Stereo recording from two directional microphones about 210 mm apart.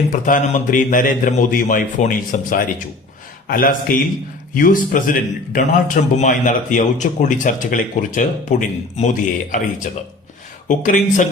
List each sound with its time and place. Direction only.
0.1 s a man's voice: 40° left (ahead or behind)
10.7 s a man's voice: 35° left (ahead or behind)